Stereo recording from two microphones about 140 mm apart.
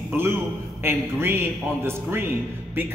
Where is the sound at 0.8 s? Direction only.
15° right (ahead or behind).